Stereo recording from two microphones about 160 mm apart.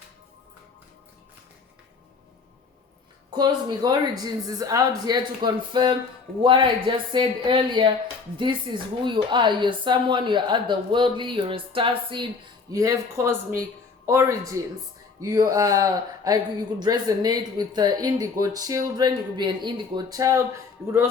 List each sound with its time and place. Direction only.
3.3 s a woman's voice: 25° right (ahead or behind)
12.7 s speech: 20° right (ahead or behind)